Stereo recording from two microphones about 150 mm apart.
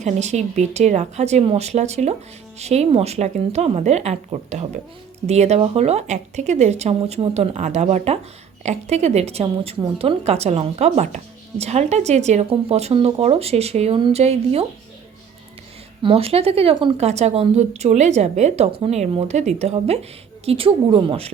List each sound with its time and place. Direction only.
0.0 s a woman's voice: 50° right (ahead or behind)
16.0 s a woman's voice: 40° right (ahead or behind)